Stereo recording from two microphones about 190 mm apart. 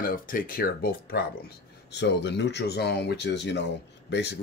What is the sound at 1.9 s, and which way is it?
Speech, 65° left (ahead or behind).